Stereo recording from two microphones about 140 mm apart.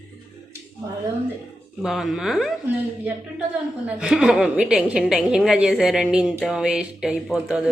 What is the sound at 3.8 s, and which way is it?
A woman's voice, 5° right (ahead or behind).